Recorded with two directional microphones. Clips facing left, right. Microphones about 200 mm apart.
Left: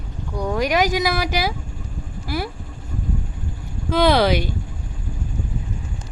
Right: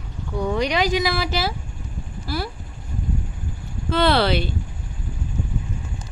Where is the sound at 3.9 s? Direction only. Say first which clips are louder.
Left 2 dB; 10° left (ahead or behind).